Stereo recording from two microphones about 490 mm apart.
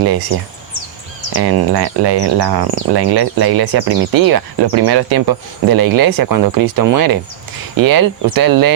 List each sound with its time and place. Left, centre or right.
1.4 s speech: right